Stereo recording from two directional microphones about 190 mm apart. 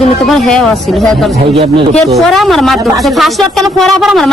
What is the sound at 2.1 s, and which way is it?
Speech, centre (ahead or behind).